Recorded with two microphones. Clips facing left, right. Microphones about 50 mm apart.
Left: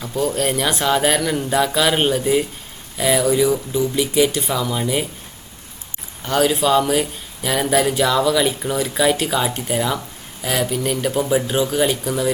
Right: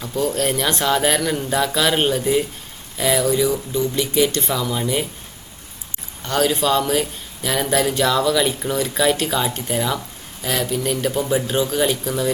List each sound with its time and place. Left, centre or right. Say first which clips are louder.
0.0 s speech: left 1 dB; centre
6.2 s speech: left 2 dB; centre